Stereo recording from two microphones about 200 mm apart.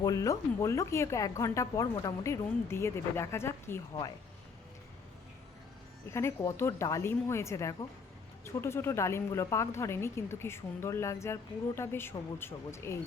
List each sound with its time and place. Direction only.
0.0 s a woman's voice: 15° left (ahead or behind)
6.1 s a woman's voice: 15° left (ahead or behind)